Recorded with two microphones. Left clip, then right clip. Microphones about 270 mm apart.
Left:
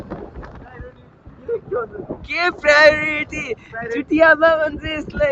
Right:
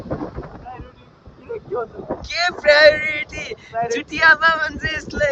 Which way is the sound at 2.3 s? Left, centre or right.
Centre.